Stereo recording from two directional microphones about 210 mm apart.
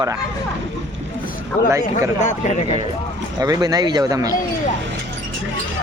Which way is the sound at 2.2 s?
35° left (ahead or behind).